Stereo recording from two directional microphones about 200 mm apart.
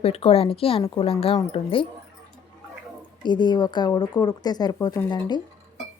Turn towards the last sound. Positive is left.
turn(degrees=20)  # may be behind; listen again after turning